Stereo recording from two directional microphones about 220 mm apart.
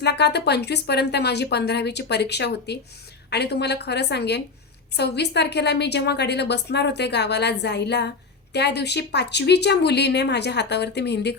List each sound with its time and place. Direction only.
0.0 s a woman's voice: 50° left (ahead or behind)